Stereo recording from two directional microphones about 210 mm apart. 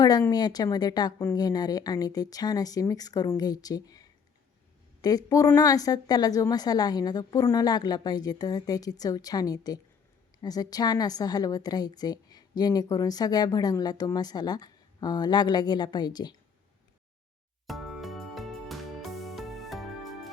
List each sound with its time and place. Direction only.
0.0 s a woman's voice: 20° left (ahead or behind)
5.0 s a woman's voice: 15° left (ahead or behind)
17.7 s music: centre (ahead or behind)